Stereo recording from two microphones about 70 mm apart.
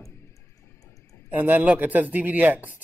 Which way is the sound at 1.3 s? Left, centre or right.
Right.